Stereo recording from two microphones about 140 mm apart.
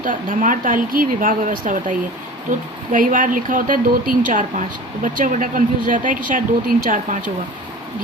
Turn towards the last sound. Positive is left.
turn(degrees=-70)  # may be behind; listen again after turning